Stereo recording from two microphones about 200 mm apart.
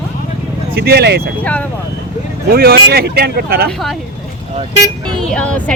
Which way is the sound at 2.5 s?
50° right (ahead or behind).